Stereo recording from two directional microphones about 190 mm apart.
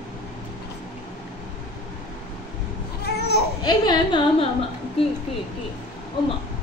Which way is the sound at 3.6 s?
25° left (ahead or behind).